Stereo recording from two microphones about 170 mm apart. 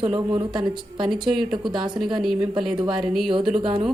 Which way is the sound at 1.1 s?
Centre (ahead or behind).